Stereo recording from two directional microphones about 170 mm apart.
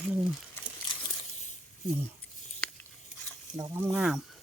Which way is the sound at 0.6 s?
15° left (ahead or behind).